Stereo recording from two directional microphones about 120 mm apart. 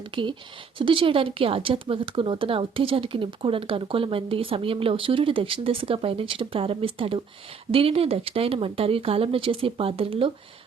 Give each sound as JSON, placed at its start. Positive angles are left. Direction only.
{"t": 0.1, "sound": "a woman's voice", "side_deg": -45}